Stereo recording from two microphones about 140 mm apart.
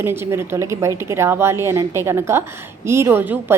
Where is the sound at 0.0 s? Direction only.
15° right (ahead or behind).